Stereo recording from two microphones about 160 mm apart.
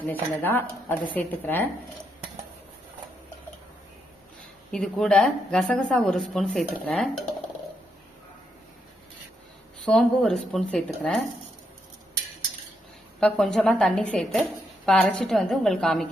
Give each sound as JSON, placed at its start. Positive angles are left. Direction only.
{"t": 0.1, "sound": "speech", "side_deg": 10}
{"t": 4.7, "sound": "speech", "side_deg": 5}
{"t": 9.8, "sound": "speech", "side_deg": 5}
{"t": 13.1, "sound": "speech", "side_deg": 5}